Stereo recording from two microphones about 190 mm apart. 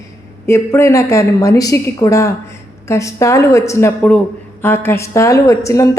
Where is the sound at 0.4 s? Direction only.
15° left (ahead or behind).